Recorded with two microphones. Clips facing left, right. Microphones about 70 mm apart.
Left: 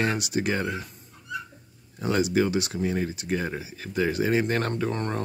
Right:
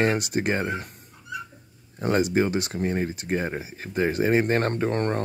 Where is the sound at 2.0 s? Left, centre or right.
Right.